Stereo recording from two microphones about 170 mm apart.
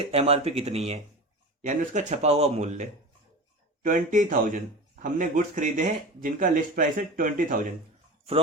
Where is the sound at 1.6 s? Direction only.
50° right (ahead or behind).